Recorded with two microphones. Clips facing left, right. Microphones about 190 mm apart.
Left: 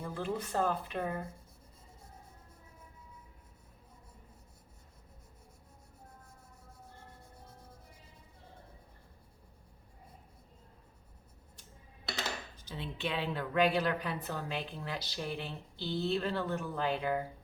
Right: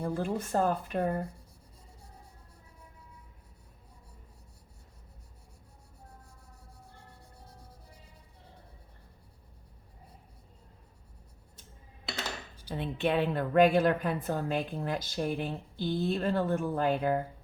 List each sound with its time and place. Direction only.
0.0 s a woman's voice: 45° right (ahead or behind)
12.7 s a woman's voice: 55° right (ahead or behind)